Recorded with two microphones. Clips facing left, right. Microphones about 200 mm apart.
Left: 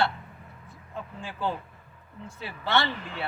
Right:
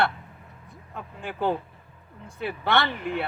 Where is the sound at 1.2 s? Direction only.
55° right (ahead or behind).